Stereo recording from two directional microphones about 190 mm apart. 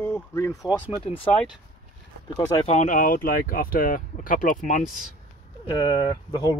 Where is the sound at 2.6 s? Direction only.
40° left (ahead or behind).